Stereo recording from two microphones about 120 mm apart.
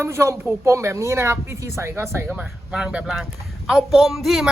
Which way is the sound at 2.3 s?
10° right (ahead or behind).